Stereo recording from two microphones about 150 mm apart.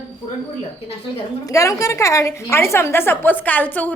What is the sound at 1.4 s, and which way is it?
A woman's voice, 20° left (ahead or behind).